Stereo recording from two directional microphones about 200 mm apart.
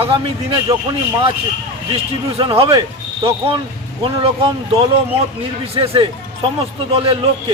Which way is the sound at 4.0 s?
25° right (ahead or behind).